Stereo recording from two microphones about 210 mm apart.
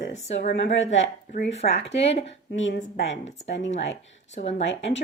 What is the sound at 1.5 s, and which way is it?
Speech, 30° left (ahead or behind).